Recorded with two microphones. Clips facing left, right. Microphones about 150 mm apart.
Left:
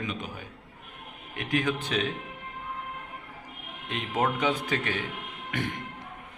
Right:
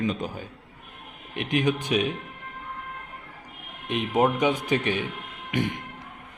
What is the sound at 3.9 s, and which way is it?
Speech, 15° right (ahead or behind).